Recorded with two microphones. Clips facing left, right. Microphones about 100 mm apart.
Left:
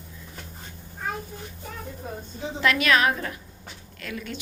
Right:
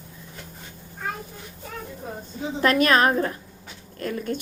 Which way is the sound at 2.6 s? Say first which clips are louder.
Right 3 dB; 40° right (ahead or behind).